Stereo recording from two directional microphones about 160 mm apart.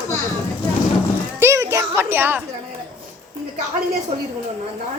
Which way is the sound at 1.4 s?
15° right (ahead or behind).